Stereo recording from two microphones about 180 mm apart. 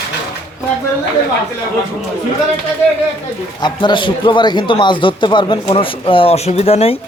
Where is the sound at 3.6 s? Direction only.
25° left (ahead or behind).